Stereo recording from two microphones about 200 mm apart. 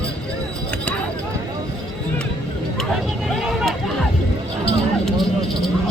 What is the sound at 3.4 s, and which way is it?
Hubbub, centre (ahead or behind).